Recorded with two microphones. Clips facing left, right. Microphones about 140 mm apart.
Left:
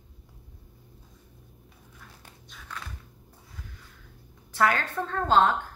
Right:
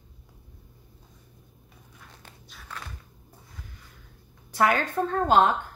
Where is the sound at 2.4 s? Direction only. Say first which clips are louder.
Even; 5° right (ahead or behind).